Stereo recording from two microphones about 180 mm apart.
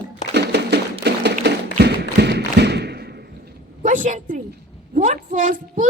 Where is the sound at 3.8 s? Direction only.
45° right (ahead or behind).